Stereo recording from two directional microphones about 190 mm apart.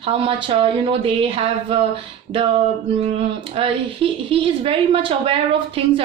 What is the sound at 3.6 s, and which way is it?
A woman's voice, 30° right (ahead or behind).